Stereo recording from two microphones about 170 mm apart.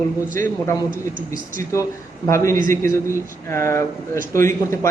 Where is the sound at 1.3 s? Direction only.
55° right (ahead or behind).